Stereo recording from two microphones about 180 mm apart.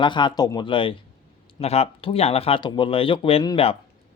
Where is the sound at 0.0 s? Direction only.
25° left (ahead or behind).